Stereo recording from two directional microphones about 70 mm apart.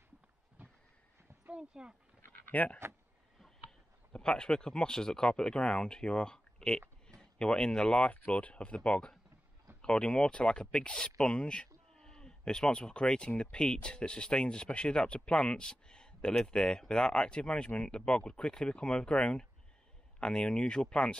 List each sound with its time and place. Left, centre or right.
1.5 s speech: centre
2.2 s a sound: left
4.1 s speech: centre